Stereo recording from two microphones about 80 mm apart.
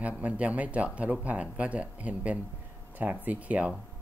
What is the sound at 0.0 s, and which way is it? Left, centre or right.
Speech, centre.